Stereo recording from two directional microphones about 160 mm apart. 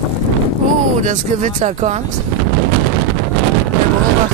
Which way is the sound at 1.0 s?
50° right (ahead or behind).